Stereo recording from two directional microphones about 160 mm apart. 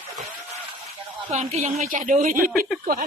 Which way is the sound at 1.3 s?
45° right (ahead or behind).